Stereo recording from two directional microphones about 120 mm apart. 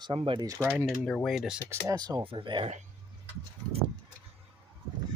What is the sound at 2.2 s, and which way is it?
Speech, 45° right (ahead or behind).